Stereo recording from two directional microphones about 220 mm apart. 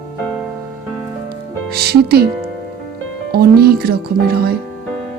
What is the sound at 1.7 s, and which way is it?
Speech, 45° right (ahead or behind).